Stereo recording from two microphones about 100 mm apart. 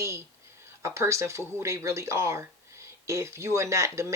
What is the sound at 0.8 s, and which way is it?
Speech, 30° right (ahead or behind).